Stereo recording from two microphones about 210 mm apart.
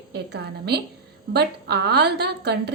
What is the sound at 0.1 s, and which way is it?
A woman's voice, 50° right (ahead or behind).